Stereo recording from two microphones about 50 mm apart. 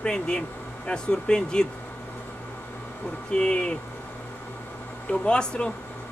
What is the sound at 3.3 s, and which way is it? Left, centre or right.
Speech, centre.